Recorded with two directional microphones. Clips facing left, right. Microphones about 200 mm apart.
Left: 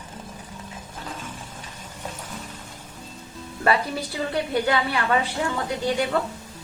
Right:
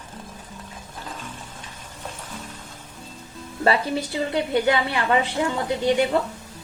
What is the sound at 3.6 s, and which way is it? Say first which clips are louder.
A woman's voice: right 2 dB; 25° right (ahead or behind).